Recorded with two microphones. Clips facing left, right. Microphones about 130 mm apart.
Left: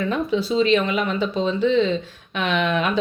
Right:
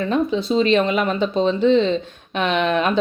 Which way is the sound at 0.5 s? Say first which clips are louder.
Right 2 dB; 45° right (ahead or behind).